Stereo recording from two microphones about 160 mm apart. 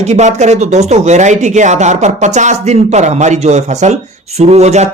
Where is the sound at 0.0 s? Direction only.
45° right (ahead or behind).